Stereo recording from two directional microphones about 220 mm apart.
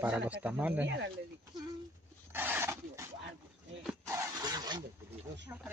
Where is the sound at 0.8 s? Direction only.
50° right (ahead or behind).